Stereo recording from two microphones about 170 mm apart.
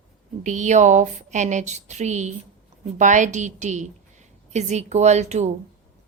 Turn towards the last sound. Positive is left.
turn(degrees=-40)  # may be behind; listen again after turning